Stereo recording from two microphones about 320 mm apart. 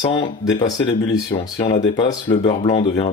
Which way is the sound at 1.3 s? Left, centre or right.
Centre.